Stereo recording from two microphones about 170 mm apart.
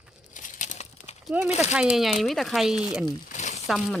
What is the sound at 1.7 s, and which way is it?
A man's voice, 5° right (ahead or behind).